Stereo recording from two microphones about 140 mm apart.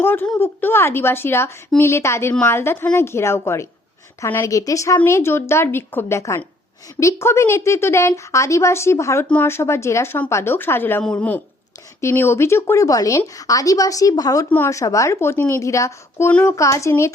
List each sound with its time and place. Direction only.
0.0 s a woman's voice: 15° left (ahead or behind)